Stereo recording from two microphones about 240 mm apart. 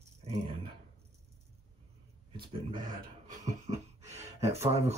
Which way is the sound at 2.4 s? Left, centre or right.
Centre.